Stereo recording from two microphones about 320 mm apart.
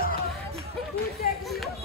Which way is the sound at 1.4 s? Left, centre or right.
Centre.